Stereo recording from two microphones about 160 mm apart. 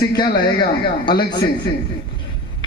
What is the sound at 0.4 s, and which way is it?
A man's voice, 30° left (ahead or behind).